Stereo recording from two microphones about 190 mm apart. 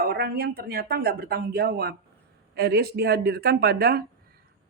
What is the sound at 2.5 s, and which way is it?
Speech, 55° right (ahead or behind).